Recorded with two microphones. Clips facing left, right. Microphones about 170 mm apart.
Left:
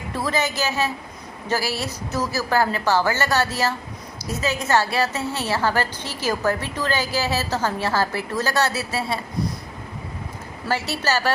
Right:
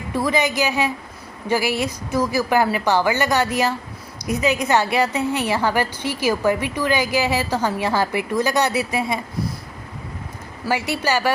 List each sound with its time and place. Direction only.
0.1 s a woman's voice: 15° right (ahead or behind)
10.7 s a woman's voice: 15° right (ahead or behind)